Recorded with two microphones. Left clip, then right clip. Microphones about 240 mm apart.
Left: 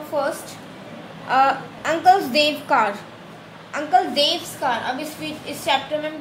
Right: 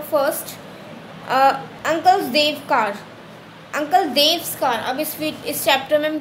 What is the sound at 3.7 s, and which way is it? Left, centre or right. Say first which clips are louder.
A woman's voice: right 1 dB; right.